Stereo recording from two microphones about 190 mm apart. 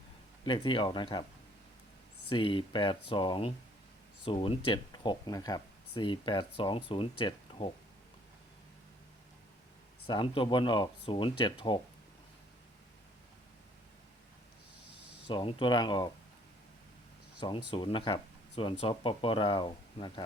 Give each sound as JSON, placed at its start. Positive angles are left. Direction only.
{"t": 0.4, "sound": "speech", "side_deg": 25}
{"t": 2.3, "sound": "speech", "side_deg": 25}
{"t": 10.1, "sound": "speech", "side_deg": 25}
{"t": 15.3, "sound": "speech", "side_deg": 25}
{"t": 17.4, "sound": "speech", "side_deg": 25}